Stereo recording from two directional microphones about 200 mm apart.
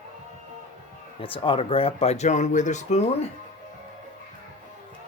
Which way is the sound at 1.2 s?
25° left (ahead or behind).